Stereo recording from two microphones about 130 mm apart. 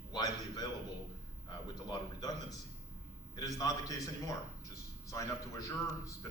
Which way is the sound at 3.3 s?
25° left (ahead or behind).